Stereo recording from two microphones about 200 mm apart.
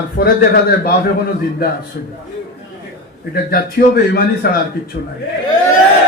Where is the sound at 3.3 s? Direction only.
50° left (ahead or behind).